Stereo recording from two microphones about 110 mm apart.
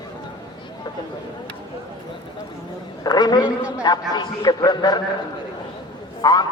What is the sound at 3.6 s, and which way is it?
Speech, 10° right (ahead or behind).